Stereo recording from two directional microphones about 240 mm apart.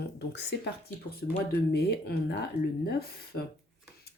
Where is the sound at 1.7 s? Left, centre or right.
Left.